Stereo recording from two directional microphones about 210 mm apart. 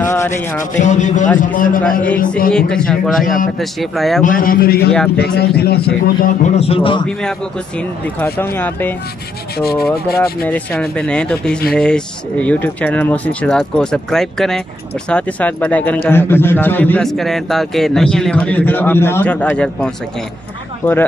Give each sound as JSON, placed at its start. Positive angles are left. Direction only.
{"t": 0.0, "sound": "rub", "side_deg": 10}
{"t": 0.6, "sound": "a man's voice", "side_deg": 35}
{"t": 2.5, "sound": "speech", "side_deg": 5}
{"t": 4.2, "sound": "a man's voice", "side_deg": 40}
{"t": 4.9, "sound": "speech", "side_deg": 5}
{"t": 5.2, "sound": "a man's voice", "side_deg": 50}
{"t": 6.4, "sound": "a man's voice", "side_deg": 30}
{"t": 8.5, "sound": "a man's voice", "side_deg": 10}
{"t": 10.1, "sound": "a man's voice", "side_deg": 10}